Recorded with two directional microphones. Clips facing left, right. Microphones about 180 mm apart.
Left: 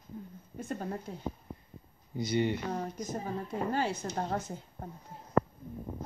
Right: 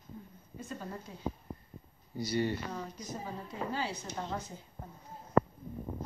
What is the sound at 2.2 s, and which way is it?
Speech, 20° left (ahead or behind).